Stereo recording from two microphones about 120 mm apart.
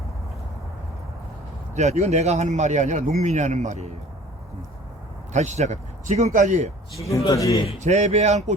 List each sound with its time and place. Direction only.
1.7 s a man's voice: 70° right (ahead or behind)
5.3 s speech: 75° right (ahead or behind); by 6.7 s 90° right
7.3 s speech: 30° left (ahead or behind)
7.8 s speech: 75° right (ahead or behind)